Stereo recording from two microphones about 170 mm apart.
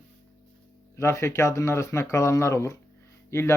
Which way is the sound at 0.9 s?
15° left (ahead or behind).